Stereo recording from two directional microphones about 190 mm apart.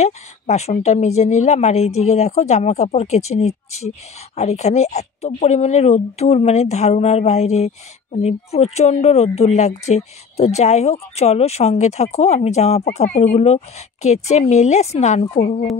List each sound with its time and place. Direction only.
0.0 s speech: 35° left (ahead or behind)